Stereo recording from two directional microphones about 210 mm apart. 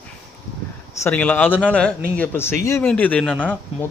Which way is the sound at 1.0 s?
10° left (ahead or behind).